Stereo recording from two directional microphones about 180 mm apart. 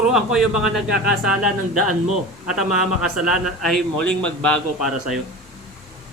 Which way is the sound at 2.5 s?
5° right (ahead or behind).